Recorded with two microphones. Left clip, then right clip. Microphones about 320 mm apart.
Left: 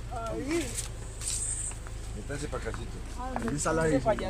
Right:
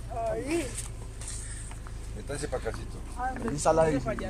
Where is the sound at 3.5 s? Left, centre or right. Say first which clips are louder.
Right 5 dB; centre.